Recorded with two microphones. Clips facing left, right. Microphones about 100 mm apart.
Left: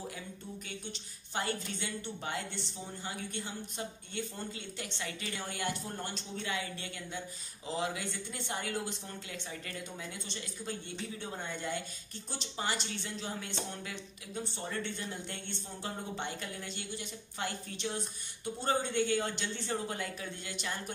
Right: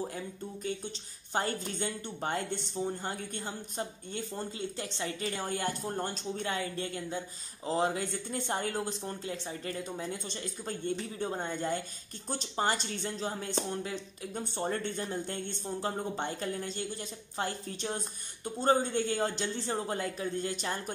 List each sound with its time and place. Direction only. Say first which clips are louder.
0.7 s a woman's voice: right 8 dB; 40° right (ahead or behind)